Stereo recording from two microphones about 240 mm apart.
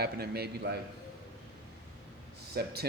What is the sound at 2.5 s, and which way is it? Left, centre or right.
Speech, right.